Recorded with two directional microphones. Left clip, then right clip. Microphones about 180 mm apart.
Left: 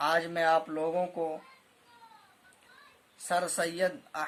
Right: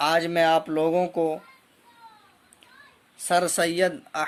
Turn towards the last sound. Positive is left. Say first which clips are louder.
# right 7 dB
turn(degrees=-30)  # may be behind; listen again after turning